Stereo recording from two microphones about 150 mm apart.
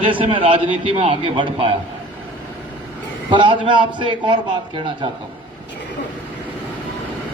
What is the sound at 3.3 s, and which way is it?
A man's voice, 30° right (ahead or behind).